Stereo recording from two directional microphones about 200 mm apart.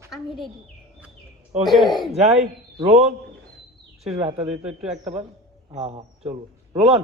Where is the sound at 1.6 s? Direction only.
Centre (ahead or behind).